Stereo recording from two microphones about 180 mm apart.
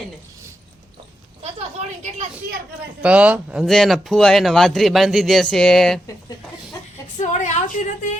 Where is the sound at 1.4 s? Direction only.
35° right (ahead or behind).